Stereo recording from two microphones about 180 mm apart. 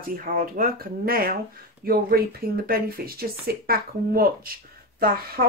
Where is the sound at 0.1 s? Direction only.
50° right (ahead or behind).